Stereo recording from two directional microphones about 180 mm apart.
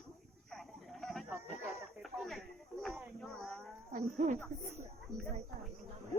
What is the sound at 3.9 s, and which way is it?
Speech, 40° right (ahead or behind).